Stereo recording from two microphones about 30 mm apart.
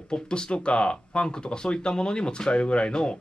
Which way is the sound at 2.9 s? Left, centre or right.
Left.